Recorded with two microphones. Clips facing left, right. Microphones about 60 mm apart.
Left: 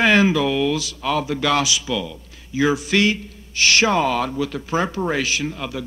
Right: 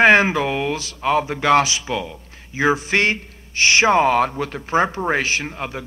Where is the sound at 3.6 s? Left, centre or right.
Right.